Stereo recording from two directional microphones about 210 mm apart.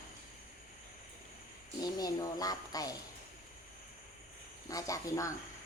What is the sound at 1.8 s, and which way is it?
Speech, 20° left (ahead or behind).